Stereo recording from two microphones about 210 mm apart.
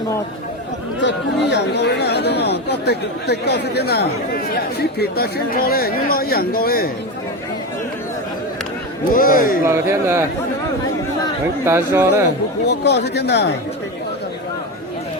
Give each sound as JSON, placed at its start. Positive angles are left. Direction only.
{"t": 1.0, "sound": "speech", "side_deg": 55}
{"t": 9.1, "sound": "speech", "side_deg": 45}
{"t": 9.6, "sound": "speech", "side_deg": -10}
{"t": 11.6, "sound": "speech", "side_deg": -10}
{"t": 12.6, "sound": "speech", "side_deg": 55}